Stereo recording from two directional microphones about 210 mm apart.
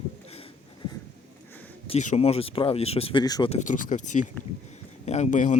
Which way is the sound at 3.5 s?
35° left (ahead or behind).